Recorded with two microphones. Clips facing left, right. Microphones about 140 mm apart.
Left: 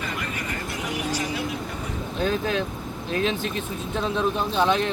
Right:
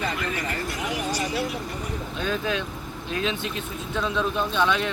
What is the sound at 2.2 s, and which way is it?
Speech, 40° left (ahead or behind).